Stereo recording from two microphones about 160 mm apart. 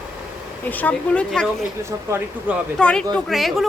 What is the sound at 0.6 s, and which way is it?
Speech, 10° left (ahead or behind).